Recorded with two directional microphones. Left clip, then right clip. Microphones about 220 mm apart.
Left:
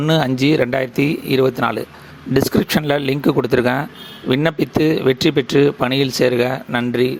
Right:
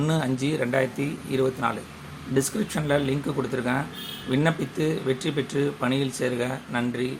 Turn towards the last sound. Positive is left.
turn(degrees=40)  # may be behind; listen again after turning